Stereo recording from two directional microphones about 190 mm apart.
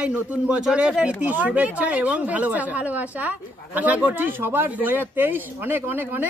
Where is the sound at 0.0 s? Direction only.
5° right (ahead or behind).